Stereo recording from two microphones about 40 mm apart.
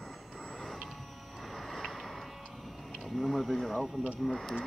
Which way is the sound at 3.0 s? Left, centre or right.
Centre.